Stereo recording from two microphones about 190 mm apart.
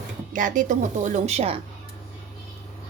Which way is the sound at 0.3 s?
45° right (ahead or behind).